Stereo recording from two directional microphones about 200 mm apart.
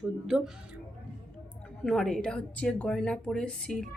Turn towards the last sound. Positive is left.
turn(degrees=0)  # may be behind; listen again after turning